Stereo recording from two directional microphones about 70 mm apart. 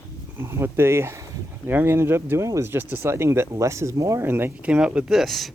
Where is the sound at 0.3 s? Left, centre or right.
Right.